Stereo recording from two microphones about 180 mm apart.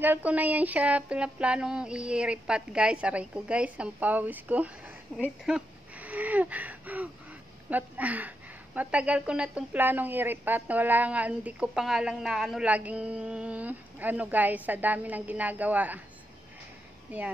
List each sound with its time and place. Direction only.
0.0 s speech: 10° right (ahead or behind)